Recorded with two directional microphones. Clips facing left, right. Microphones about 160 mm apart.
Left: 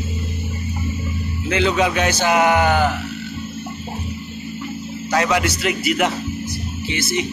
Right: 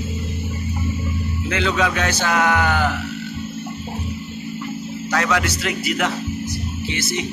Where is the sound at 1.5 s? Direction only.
20° left (ahead or behind).